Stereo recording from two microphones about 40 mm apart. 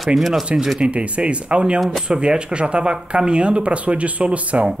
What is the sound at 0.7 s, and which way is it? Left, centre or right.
Speech, right.